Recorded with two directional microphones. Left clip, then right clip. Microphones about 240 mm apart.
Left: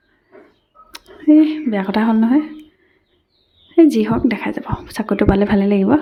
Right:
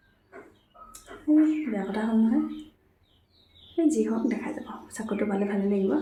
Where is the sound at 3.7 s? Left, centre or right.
Left.